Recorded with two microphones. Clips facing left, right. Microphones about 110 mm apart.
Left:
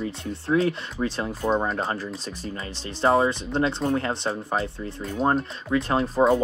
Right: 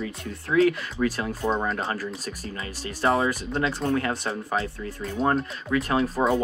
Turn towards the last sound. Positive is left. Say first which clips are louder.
# left 2 dB
turn(degrees=30)  # may be behind; listen again after turning